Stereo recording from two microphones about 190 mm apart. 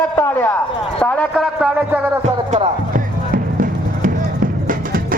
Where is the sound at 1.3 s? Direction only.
5° right (ahead or behind).